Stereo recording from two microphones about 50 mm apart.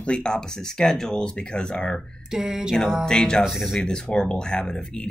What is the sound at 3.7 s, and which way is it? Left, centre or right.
Speech, centre.